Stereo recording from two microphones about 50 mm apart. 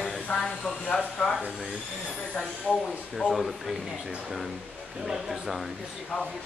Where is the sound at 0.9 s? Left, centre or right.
Left.